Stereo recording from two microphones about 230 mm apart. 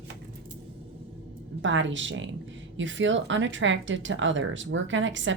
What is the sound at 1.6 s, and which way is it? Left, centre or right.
Speech, right.